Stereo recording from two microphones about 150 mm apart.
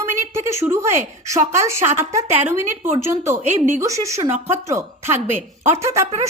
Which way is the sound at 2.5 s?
15° right (ahead or behind).